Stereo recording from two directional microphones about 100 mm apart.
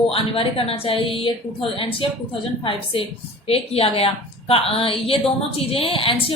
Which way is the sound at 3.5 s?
80° left.